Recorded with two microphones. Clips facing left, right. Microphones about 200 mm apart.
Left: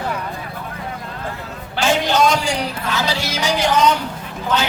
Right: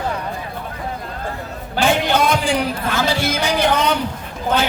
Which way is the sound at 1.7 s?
55° right (ahead or behind).